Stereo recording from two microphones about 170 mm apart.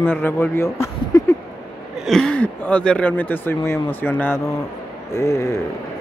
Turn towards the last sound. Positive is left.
turn(degrees=15)  # may be behind; listen again after turning